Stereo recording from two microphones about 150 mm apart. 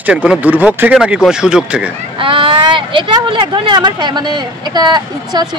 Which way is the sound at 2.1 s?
35° right (ahead or behind).